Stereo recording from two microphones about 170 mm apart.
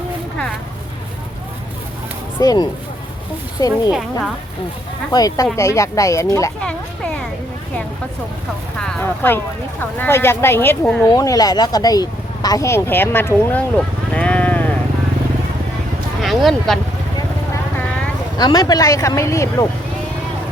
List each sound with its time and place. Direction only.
2.4 s speech: 20° left (ahead or behind)
5.1 s speech: 20° left (ahead or behind)
6.6 s speech: 5° left (ahead or behind)
8.8 s speech: 10° left (ahead or behind)
11.0 s speech: 20° left (ahead or behind)
14.1 s livestock: 5° left (ahead or behind)
16.2 s speech: centre (ahead or behind)
18.3 s speech: 25° left (ahead or behind)